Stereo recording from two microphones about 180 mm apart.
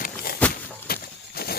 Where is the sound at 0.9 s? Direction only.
60° left (ahead or behind).